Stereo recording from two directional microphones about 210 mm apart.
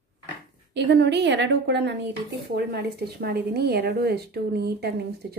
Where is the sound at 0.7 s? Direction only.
55° right (ahead or behind).